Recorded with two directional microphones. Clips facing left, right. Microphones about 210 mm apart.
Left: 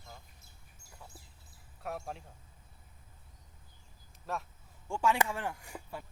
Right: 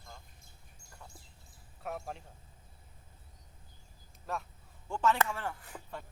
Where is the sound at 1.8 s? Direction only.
Centre (ahead or behind).